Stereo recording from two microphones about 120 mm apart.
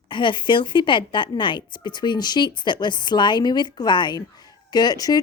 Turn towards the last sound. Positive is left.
turn(degrees=35)  # may be behind; listen again after turning